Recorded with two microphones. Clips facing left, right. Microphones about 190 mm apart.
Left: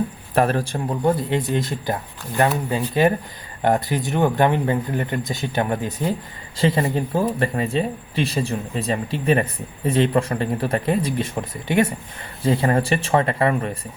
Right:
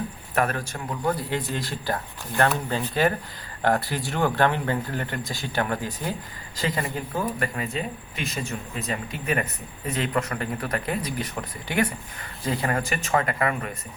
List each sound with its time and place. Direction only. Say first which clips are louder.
0.3 s speech: left 6 dB; 30° left (ahead or behind)